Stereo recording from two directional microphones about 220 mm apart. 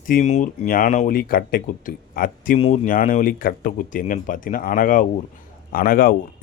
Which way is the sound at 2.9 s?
40° left (ahead or behind).